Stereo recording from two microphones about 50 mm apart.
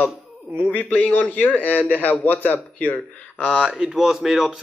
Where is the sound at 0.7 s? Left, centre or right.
Left.